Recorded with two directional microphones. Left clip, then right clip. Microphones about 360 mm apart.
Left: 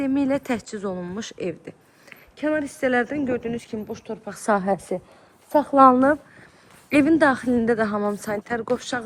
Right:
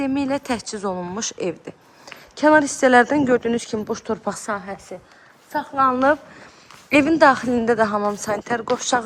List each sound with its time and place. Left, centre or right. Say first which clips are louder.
0.0 s a woman's voice: even; centre
4.4 s a woman's voice: left 6 dB; centre
6.9 s a woman's voice: right 4 dB; centre